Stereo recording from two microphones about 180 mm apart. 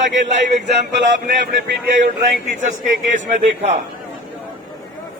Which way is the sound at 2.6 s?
45° right (ahead or behind).